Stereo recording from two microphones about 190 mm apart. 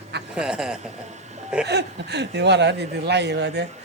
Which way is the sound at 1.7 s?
60° right (ahead or behind).